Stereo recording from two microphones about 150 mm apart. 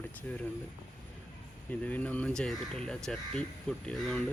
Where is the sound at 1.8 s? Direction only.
10° left (ahead or behind).